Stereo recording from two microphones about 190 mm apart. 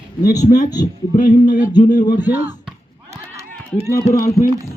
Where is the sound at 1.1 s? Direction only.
45° left (ahead or behind).